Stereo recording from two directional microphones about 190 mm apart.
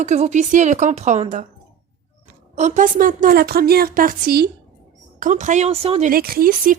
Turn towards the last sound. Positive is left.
turn(degrees=-45)  # may be behind; listen again after turning